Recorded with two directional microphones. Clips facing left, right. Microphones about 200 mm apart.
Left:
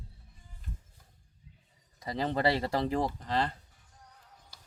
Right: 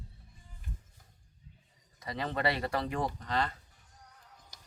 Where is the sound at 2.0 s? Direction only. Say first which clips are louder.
Left 4 dB; 25° left (ahead or behind).